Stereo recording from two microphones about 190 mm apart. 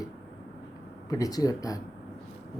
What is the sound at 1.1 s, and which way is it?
Speech, 20° left (ahead or behind).